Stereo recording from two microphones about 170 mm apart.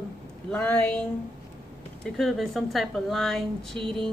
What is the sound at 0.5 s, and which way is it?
Speech, 10° left (ahead or behind).